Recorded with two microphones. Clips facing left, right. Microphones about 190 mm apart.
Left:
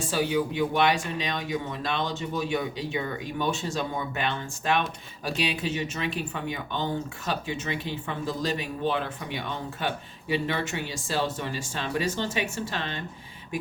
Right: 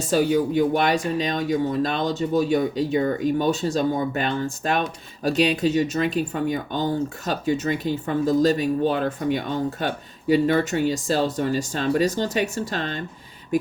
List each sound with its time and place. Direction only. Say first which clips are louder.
0.1 s speech: right 7 dB; 45° right (ahead or behind)